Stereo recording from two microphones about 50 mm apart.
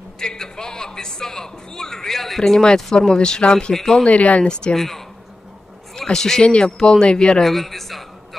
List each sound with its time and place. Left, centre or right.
0.2 s speech: centre
4.0 s speech: left
4.7 s speech: centre
7.4 s a man's voice: centre